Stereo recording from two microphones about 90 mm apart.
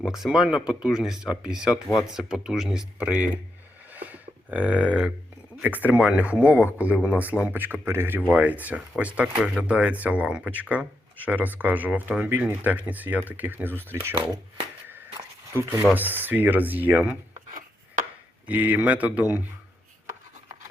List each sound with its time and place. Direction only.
0.0 s speech: 5° right (ahead or behind)
3.9 s a sound: 20° right (ahead or behind)
5.6 s speech: 20° right (ahead or behind)
15.5 s speech: 30° right (ahead or behind)
18.4 s speech: 15° right (ahead or behind)